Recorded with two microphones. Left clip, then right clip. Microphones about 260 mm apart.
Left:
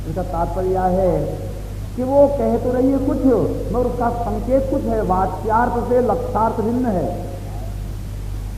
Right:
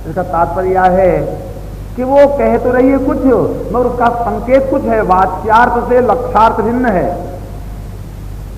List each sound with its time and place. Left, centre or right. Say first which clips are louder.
0.2 s a man's voice: right 9 dB; right